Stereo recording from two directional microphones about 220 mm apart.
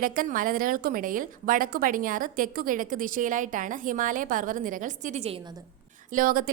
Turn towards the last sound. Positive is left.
turn(degrees=-40)  # may be behind; listen again after turning